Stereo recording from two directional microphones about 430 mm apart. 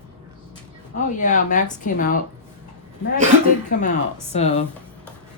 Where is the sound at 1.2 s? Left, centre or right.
Centre.